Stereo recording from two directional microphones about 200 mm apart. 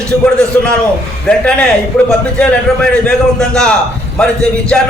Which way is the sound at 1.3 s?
5° left (ahead or behind).